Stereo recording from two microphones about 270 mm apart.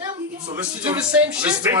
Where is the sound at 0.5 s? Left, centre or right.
Centre.